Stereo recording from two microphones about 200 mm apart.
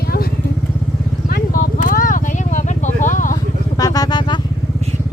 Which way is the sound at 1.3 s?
45° left (ahead or behind).